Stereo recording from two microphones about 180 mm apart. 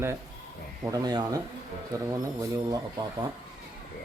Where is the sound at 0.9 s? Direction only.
20° right (ahead or behind).